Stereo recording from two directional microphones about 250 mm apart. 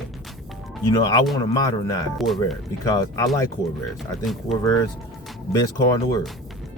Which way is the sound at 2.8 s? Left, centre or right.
Centre.